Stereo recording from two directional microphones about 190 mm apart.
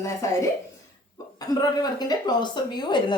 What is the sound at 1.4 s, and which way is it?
Speech, 20° left (ahead or behind).